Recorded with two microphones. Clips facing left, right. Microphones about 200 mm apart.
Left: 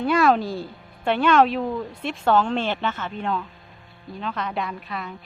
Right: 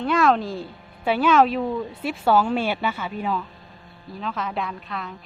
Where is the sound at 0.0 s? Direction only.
5° left (ahead or behind).